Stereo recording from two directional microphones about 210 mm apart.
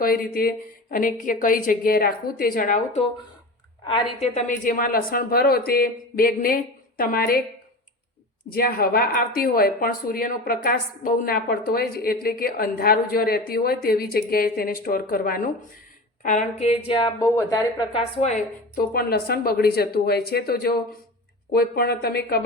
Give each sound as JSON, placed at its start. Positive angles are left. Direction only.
{"t": 0.0, "sound": "a woman's voice", "side_deg": 45}
{"t": 8.4, "sound": "a woman's voice", "side_deg": 45}
{"t": 18.8, "sound": "a woman's voice", "side_deg": 45}